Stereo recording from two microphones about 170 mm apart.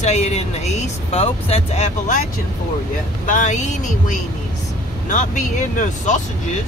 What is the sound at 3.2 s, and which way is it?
Speech, 45° left (ahead or behind).